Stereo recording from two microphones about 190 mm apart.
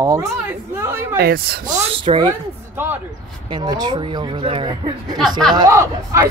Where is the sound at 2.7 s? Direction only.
10° right (ahead or behind).